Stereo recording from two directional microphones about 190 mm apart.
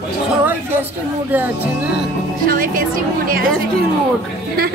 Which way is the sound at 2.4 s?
50° right (ahead or behind).